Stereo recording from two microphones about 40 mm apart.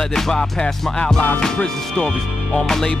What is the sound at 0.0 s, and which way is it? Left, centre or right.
Music, centre.